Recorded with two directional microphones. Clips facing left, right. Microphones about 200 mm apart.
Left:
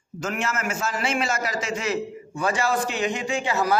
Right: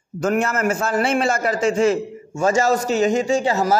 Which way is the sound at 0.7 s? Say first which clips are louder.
Right 8 dB; 55° right (ahead or behind).